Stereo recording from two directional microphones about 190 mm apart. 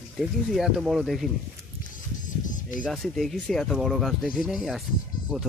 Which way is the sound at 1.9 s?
45° left (ahead or behind).